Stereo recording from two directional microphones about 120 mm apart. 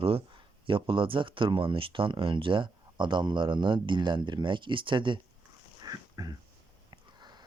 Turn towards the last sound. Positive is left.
turn(degrees=-35)  # may be behind; listen again after turning